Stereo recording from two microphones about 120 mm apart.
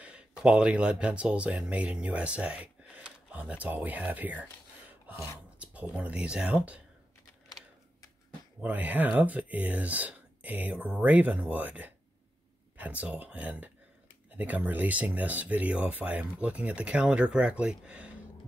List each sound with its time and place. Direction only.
0.0 s speech: 10° right (ahead or behind)
5.0 s a sound: 20° right (ahead or behind)
5.6 s speech: 10° right (ahead or behind)
8.5 s speech: 15° right (ahead or behind)